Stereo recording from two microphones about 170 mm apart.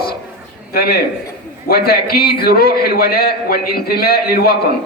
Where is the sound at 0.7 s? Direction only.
65° left (ahead or behind).